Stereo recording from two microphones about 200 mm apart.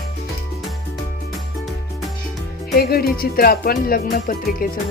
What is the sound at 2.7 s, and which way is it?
Music, 50° left (ahead or behind).